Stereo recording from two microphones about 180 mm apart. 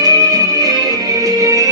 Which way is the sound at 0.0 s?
20° right (ahead or behind).